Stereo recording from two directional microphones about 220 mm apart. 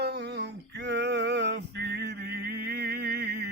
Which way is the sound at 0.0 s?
50° right (ahead or behind).